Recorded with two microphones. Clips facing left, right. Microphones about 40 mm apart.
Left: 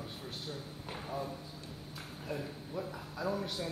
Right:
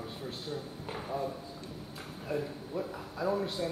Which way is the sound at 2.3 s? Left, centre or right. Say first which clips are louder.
Right 6 dB; centre.